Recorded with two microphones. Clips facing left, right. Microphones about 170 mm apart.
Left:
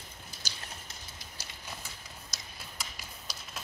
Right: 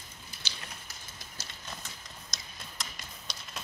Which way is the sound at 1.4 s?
10° left (ahead or behind).